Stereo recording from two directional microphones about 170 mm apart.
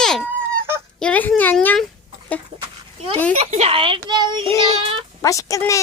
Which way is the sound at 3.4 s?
40° right (ahead or behind).